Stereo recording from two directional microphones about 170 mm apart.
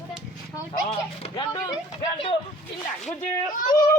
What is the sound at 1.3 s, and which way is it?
Speech, 25° left (ahead or behind).